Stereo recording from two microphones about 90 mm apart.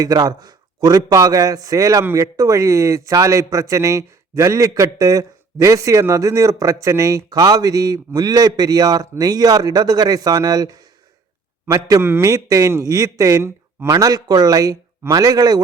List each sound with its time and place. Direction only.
0.0 s a man's voice: 45° right (ahead or behind)